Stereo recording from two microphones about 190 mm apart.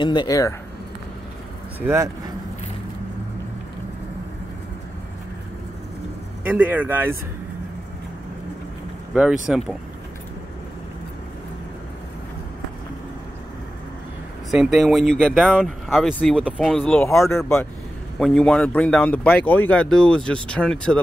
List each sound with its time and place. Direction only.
0.0 s speech: 25° left (ahead or behind)
1.8 s speech: 15° right (ahead or behind)
6.5 s speech: 10° right (ahead or behind)
9.1 s speech: 5° right (ahead or behind)
14.5 s speech: centre (ahead or behind)
18.2 s speech: centre (ahead or behind)